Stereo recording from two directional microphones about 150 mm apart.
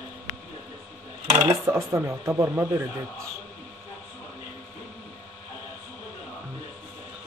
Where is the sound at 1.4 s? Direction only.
20° right (ahead or behind).